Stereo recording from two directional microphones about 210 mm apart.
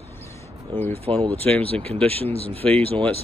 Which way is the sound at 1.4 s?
5° left (ahead or behind).